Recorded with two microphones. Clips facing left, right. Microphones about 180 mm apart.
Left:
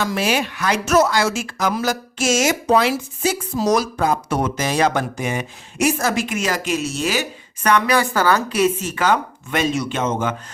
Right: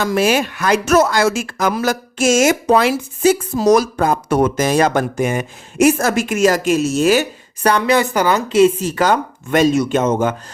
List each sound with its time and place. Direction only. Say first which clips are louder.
0.0 s speech: right 5 dB; 50° right (ahead or behind)
7.6 s a woman's voice: right 3 dB; 30° right (ahead or behind)